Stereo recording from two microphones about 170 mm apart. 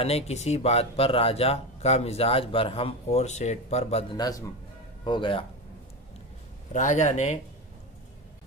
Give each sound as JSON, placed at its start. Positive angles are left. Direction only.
{"t": 0.0, "sound": "speech", "side_deg": 40}
{"t": 4.2, "sound": "speech", "side_deg": 20}
{"t": 6.7, "sound": "speech", "side_deg": 45}